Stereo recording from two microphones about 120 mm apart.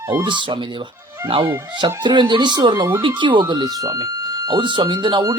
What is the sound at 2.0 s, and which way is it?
Speech, 40° right (ahead or behind).